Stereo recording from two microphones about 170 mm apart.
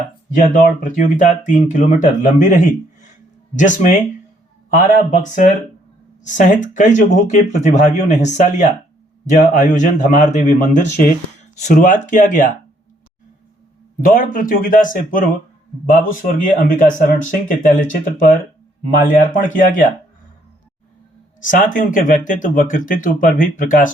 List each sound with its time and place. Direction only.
0.3 s speech: 50° left (ahead or behind)
14.0 s speech: 55° left (ahead or behind)
16.2 s speech: 50° left (ahead or behind)
21.4 s speech: 50° left (ahead or behind)